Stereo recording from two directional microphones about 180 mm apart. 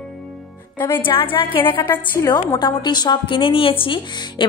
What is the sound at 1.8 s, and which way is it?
A woman's voice, 15° left (ahead or behind).